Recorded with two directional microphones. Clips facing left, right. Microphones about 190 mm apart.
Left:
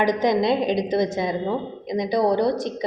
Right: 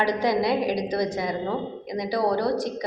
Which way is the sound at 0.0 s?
20° left (ahead or behind).